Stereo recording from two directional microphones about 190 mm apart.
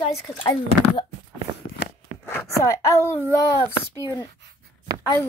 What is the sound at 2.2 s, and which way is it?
Speech, 15° left (ahead or behind).